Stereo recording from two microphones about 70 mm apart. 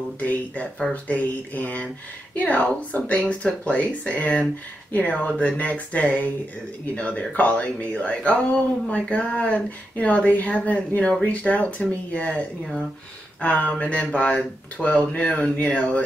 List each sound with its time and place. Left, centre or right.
0.2 s speech: left